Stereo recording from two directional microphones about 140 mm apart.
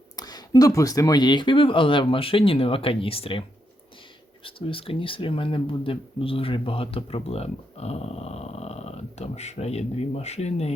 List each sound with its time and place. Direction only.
0.2 s speech: 30° left (ahead or behind)
4.4 s speech: 40° left (ahead or behind)